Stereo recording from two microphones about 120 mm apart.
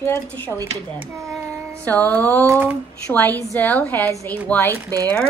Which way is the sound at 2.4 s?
20° right (ahead or behind).